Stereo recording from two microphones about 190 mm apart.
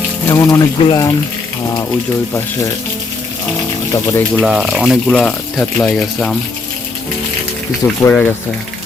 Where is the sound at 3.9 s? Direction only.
15° left (ahead or behind).